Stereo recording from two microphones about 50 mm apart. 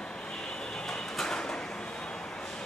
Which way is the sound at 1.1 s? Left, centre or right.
Centre.